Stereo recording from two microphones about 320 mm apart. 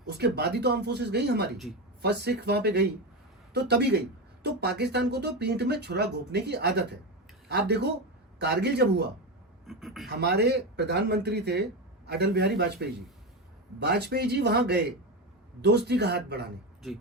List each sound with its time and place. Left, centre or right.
0.0 s speech: right
9.6 s speech: centre
10.1 s speech: right